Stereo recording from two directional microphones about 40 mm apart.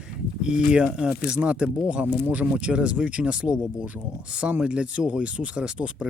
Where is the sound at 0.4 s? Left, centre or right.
Right.